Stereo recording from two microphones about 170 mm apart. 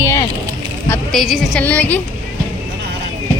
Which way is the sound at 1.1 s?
Centre (ahead or behind).